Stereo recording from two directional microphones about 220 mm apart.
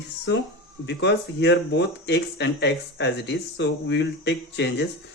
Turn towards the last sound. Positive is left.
turn(degrees=50)  # may be behind; listen again after turning